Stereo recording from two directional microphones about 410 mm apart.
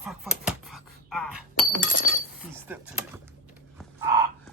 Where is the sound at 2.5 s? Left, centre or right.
Centre.